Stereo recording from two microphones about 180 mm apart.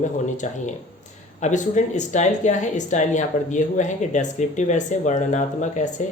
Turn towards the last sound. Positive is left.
turn(degrees=40)  # may be behind; listen again after turning